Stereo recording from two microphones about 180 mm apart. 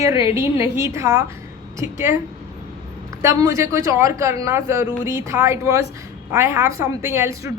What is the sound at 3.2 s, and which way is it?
A woman's voice, 20° right (ahead or behind).